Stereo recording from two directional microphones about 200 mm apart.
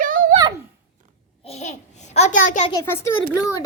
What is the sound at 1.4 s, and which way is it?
A child's voice, 35° left (ahead or behind).